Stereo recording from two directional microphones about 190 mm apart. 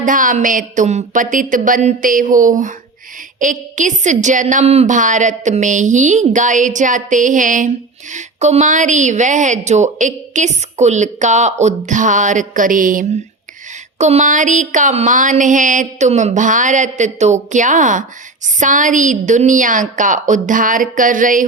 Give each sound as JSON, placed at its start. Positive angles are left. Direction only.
{"t": 0.0, "sound": "a woman's voice", "side_deg": -45}